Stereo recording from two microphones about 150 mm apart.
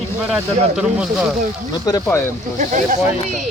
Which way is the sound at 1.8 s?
25° left (ahead or behind).